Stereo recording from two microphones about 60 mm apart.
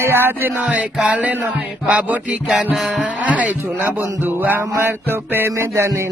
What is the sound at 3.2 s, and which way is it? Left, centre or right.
Music, right.